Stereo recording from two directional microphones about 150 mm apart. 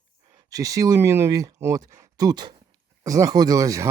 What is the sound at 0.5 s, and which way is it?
Speech, 25° right (ahead or behind).